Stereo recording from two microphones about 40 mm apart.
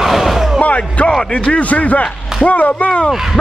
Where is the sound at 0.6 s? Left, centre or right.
Left.